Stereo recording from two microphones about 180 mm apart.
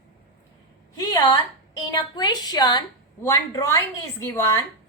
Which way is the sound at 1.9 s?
25° left (ahead or behind).